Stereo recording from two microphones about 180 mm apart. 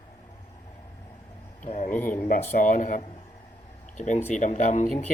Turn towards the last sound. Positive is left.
turn(degrees=40)  # may be behind; listen again after turning